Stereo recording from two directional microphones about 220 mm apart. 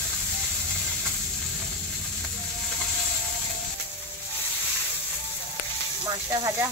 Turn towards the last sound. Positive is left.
turn(degrees=-15)  # may be behind; listen again after turning